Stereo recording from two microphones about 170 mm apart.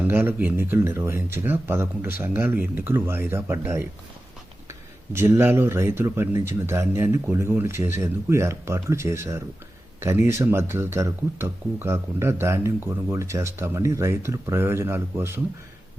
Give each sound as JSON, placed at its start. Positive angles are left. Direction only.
{"t": 0.0, "sound": "speech", "side_deg": -10}
{"t": 5.1, "sound": "speech", "side_deg": -15}